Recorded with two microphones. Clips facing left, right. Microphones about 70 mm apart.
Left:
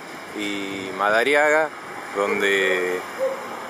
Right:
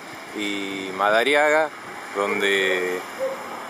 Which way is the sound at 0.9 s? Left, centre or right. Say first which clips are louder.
Even; centre.